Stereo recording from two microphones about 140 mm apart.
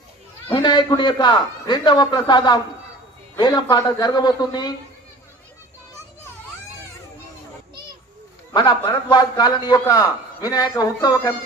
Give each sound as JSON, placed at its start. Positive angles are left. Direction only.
{"t": 0.5, "sound": "a man's voice", "side_deg": 35}
{"t": 8.5, "sound": "a man's voice", "side_deg": 30}